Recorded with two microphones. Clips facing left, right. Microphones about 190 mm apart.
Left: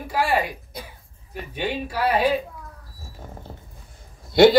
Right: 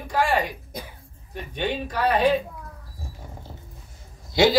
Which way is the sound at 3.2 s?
50° left (ahead or behind).